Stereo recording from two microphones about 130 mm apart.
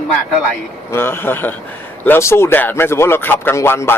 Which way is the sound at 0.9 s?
20° left (ahead or behind).